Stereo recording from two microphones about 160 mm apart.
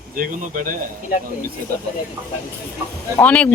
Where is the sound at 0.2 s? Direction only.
55° right (ahead or behind).